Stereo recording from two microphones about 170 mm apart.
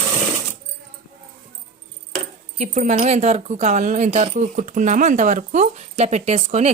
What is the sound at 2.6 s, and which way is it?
Speech, 45° right (ahead or behind).